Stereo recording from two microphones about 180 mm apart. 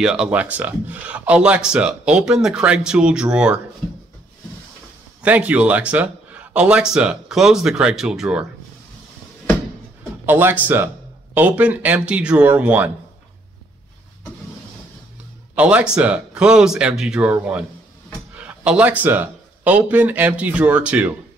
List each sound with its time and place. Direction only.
0.0 s speech: 5° right (ahead or behind)
5.2 s speech: 10° right (ahead or behind)
10.2 s speech: 10° right (ahead or behind)
15.5 s speech: 5° right (ahead or behind)